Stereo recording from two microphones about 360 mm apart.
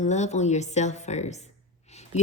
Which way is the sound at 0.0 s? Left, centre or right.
Centre.